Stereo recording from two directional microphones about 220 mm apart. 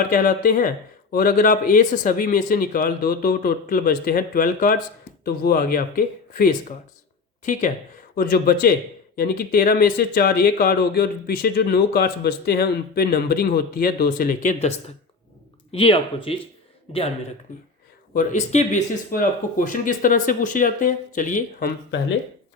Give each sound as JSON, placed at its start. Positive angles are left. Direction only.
{"t": 0.1, "sound": "speech", "side_deg": 40}
{"t": 15.7, "sound": "speech", "side_deg": 25}
{"t": 18.1, "sound": "speech", "side_deg": 35}